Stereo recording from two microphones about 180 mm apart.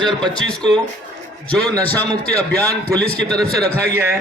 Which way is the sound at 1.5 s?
5° left (ahead or behind).